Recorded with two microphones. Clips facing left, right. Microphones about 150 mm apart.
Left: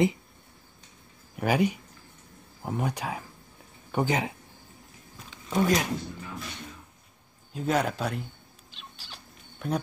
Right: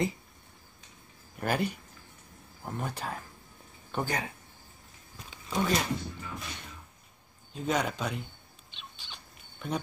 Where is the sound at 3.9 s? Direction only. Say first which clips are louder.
Left 6 dB; 20° left (ahead or behind).